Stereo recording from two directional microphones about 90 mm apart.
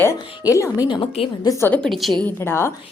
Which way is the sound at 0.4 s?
40° left (ahead or behind).